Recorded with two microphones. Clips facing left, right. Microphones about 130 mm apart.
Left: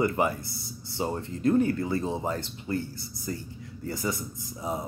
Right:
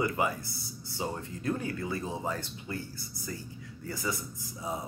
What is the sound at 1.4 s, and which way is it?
Speech, 40° left (ahead or behind).